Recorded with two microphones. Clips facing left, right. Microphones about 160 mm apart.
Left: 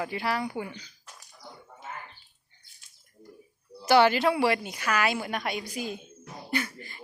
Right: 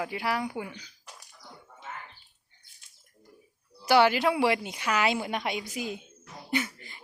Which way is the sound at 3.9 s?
10° right (ahead or behind).